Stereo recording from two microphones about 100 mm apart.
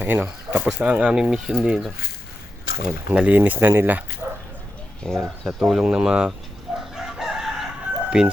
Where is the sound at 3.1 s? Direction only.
15° right (ahead or behind).